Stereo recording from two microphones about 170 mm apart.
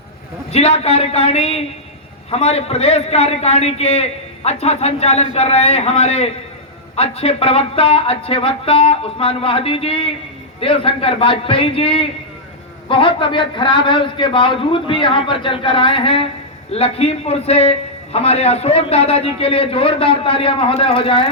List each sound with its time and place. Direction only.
0.5 s a man's voice: 35° left (ahead or behind)